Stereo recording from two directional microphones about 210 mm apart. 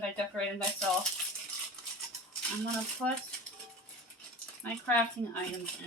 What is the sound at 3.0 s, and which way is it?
Speech, centre (ahead or behind).